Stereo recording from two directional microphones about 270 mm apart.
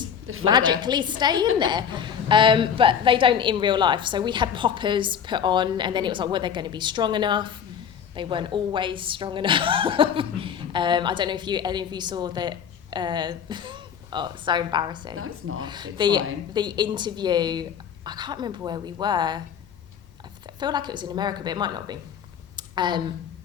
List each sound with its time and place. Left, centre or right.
0.4 s a woman's voice: centre
15.1 s speech: right
15.6 s a woman's voice: centre
20.6 s a woman's voice: centre
22.5 s a sound: centre